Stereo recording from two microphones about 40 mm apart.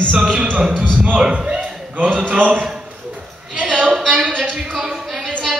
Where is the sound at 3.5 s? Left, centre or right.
Right.